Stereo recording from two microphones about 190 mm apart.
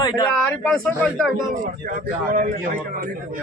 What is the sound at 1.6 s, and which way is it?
Speech, 45° right (ahead or behind).